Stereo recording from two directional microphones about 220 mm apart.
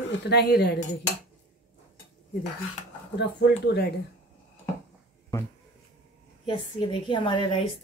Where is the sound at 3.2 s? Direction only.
50° left (ahead or behind).